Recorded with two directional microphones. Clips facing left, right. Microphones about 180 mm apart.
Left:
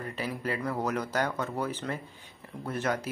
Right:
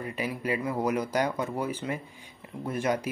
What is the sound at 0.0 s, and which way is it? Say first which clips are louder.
Speech: right 2 dB; 10° right (ahead or behind).